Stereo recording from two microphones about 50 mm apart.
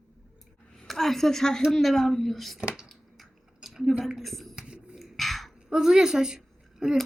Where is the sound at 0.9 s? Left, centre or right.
Centre.